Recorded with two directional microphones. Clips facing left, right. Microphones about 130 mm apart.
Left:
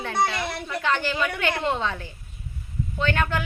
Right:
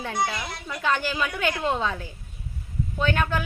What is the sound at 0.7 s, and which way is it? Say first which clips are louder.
Speech: right 1 dB; 10° right (ahead or behind).